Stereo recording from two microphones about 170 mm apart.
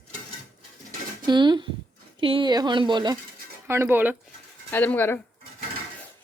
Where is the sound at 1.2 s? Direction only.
25° right (ahead or behind).